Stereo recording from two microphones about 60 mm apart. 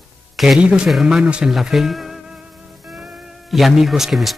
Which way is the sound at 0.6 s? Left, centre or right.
Centre.